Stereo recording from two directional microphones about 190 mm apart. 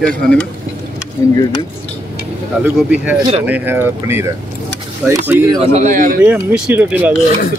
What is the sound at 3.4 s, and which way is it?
Speech, 10° right (ahead or behind).